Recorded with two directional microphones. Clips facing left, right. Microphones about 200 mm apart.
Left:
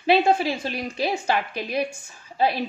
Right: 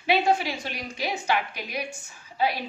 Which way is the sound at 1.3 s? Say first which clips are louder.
Left 3 dB; 30° left (ahead or behind).